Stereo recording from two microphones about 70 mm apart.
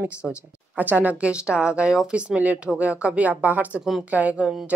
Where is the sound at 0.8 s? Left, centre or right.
Right.